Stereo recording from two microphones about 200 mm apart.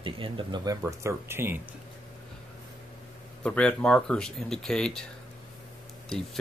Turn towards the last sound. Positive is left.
turn(degrees=0)  # may be behind; listen again after turning